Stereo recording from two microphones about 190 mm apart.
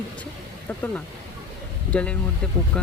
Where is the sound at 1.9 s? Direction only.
5° left (ahead or behind).